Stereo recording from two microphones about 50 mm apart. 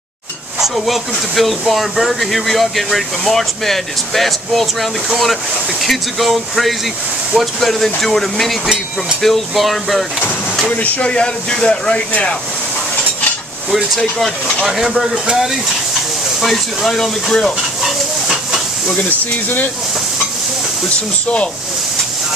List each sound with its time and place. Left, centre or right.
0.6 s speech: centre
11.0 s speech: left
13.9 s speech: centre
17.8 s chicken: centre
19.0 s speech: left